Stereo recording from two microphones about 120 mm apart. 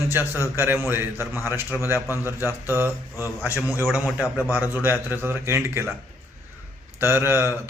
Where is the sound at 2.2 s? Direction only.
20° right (ahead or behind).